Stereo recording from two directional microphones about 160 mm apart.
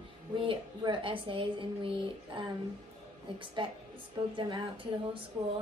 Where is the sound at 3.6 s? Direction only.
30° right (ahead or behind).